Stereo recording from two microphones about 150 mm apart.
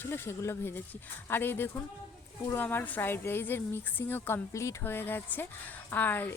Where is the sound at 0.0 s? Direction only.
15° left (ahead or behind).